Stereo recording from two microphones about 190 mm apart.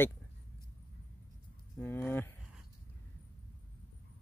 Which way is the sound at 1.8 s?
10° left (ahead or behind).